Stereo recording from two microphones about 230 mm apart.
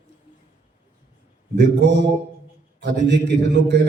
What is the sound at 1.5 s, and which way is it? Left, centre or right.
A man's voice, right.